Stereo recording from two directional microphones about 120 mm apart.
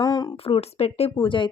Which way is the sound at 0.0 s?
35° left (ahead or behind).